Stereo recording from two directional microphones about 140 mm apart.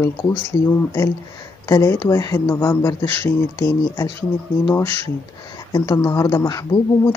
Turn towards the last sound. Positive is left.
turn(degrees=25)  # may be behind; listen again after turning